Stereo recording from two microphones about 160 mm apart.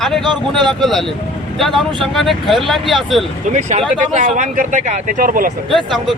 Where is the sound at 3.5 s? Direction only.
50° right (ahead or behind).